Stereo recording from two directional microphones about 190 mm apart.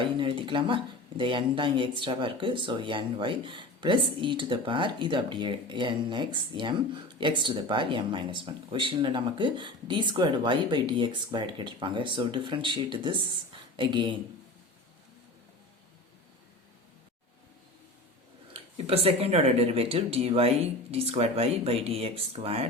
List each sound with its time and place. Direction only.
0.0 s speech: 25° right (ahead or behind)
18.5 s speech: 30° right (ahead or behind)